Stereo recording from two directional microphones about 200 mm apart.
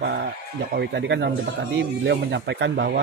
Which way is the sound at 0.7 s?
60° right (ahead or behind).